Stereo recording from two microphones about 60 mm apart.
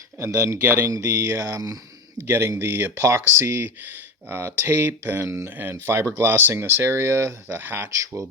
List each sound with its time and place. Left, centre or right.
0.3 s speech: right
0.6 s speech: right
0.9 s speech: right
2.2 s speech: right
7.4 s speech: right